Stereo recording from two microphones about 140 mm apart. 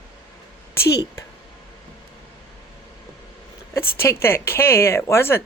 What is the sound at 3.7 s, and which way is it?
Speech, 20° left (ahead or behind).